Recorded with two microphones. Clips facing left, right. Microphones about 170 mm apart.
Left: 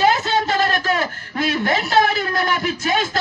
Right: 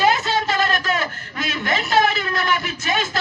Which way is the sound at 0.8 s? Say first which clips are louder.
Left 2 dB; 50° left (ahead or behind).